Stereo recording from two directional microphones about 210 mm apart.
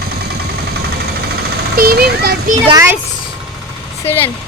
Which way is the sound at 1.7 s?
45° right (ahead or behind).